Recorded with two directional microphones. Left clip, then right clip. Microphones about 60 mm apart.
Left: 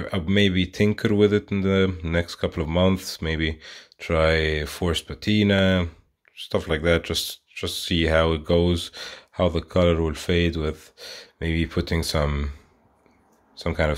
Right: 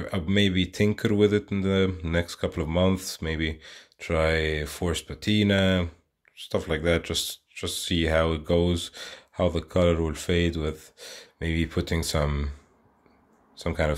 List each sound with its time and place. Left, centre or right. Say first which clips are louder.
0.0 s speech: left 3 dB; left
13.6 s speech: left 3 dB; left